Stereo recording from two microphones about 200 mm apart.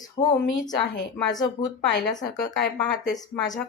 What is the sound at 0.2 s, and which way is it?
Speech, 30° left (ahead or behind).